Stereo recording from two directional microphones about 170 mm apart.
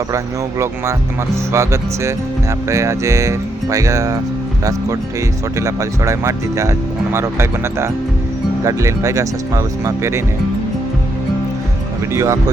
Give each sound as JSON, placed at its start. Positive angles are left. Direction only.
{"t": 1.5, "sound": "speech", "side_deg": -15}
{"t": 5.5, "sound": "speech", "side_deg": -20}
{"t": 12.1, "sound": "speech", "side_deg": -20}